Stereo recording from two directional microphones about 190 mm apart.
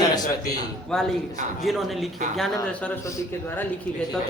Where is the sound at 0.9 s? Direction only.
5° left (ahead or behind).